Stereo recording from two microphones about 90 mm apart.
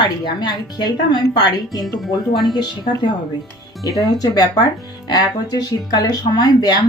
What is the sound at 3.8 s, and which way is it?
Speech, 40° left (ahead or behind).